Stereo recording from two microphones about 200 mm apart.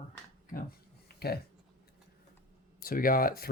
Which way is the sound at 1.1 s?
50° left (ahead or behind).